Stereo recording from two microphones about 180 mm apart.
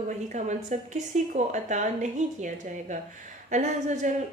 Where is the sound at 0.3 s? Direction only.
40° right (ahead or behind).